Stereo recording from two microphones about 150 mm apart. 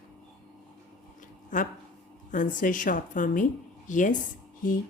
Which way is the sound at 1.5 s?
55° left (ahead or behind).